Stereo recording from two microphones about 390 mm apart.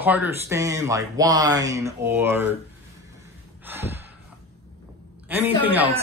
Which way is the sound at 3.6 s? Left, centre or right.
Centre.